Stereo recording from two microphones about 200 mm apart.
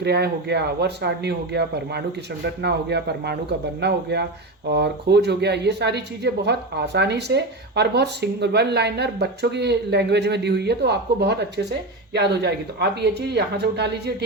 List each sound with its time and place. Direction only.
0.0 s speech: 55° right (ahead or behind)